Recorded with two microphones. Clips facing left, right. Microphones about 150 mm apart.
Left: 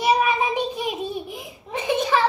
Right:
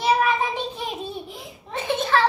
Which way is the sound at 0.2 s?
15° left (ahead or behind).